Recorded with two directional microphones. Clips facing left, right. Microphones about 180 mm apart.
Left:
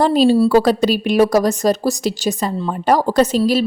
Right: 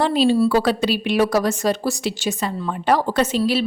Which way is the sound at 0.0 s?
40° left (ahead or behind).